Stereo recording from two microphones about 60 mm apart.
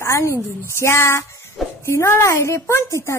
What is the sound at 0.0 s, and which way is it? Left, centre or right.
A woman's voice, left.